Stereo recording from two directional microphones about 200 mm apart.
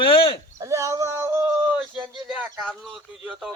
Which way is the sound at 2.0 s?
5° right (ahead or behind).